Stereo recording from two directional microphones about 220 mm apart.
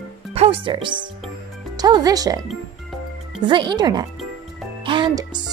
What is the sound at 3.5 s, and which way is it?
A woman's voice, 20° right (ahead or behind).